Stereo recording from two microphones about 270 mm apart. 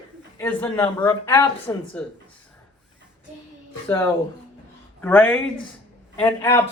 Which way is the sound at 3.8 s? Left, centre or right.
Centre.